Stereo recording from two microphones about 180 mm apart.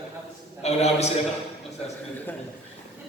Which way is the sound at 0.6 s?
35° left (ahead or behind).